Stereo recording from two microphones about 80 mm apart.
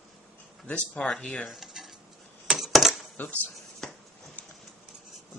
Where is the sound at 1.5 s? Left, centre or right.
Centre.